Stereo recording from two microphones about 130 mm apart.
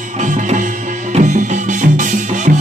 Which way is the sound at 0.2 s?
75° right (ahead or behind).